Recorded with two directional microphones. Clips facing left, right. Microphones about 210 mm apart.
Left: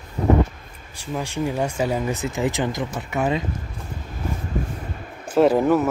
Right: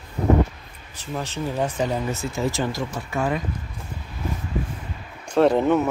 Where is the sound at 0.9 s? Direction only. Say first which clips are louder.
Left 2 dB; 10° left (ahead or behind).